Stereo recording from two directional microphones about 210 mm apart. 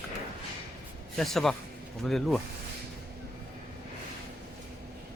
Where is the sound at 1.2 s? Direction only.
Centre (ahead or behind).